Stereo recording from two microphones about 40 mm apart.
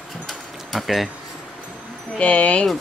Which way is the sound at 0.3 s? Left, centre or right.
Centre.